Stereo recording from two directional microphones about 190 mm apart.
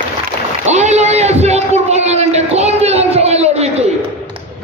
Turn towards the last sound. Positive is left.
turn(degrees=-35)  # may be behind; listen again after turning